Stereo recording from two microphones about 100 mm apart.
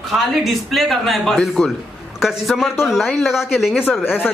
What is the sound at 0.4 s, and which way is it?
Speech, centre (ahead or behind).